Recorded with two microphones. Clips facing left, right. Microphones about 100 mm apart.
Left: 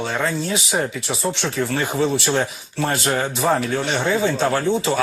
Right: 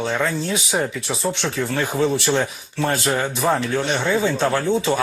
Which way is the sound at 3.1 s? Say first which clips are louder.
Left 2 dB; centre (ahead or behind).